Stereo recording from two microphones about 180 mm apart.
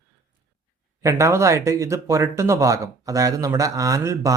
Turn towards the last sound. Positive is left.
turn(degrees=-15)  # may be behind; listen again after turning